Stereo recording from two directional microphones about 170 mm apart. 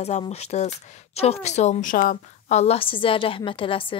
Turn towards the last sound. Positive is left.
turn(degrees=30)  # may be behind; listen again after turning